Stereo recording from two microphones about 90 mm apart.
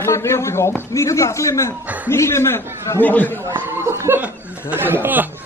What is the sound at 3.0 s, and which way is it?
Speech, 20° left (ahead or behind).